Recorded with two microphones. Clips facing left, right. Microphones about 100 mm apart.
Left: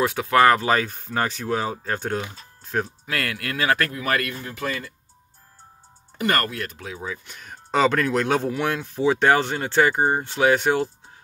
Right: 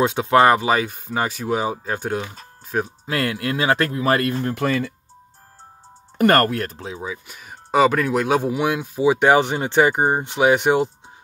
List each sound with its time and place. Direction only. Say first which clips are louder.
0.0 s speech: right 2 dB; 25° right (ahead or behind); by 2.9 s 5° right (ahead or behind)
3.1 s speech: right 5 dB; 25° right (ahead or behind)
4.4 s speech: right 8 dB; 60° right (ahead or behind)
6.1 s speech: right 8 dB; 50° right (ahead or behind)
6.7 s speech: right 3 dB; 30° right (ahead or behind)
7.0 s speech: right 2 dB; 10° right (ahead or behind)